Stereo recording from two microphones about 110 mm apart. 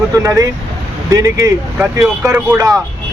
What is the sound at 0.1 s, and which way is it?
Speech, 30° right (ahead or behind).